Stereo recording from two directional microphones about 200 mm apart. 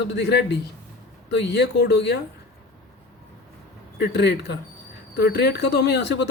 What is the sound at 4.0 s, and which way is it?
A man's voice, 55° left (ahead or behind).